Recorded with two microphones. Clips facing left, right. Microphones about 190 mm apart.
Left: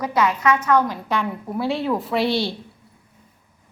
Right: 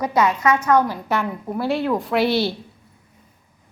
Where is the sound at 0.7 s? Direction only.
10° right (ahead or behind).